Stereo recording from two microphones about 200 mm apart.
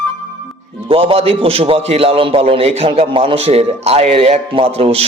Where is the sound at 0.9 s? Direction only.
30° right (ahead or behind).